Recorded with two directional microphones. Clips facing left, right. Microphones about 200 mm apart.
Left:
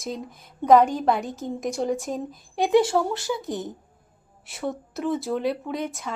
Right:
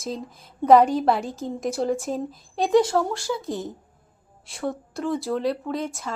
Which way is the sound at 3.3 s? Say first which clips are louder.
Right 1 dB; 20° left (ahead or behind).